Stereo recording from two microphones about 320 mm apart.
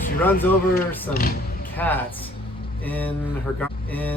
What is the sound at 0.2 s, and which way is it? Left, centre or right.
Speech, centre.